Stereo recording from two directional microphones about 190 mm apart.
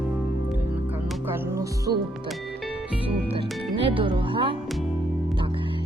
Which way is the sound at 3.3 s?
25° right (ahead or behind).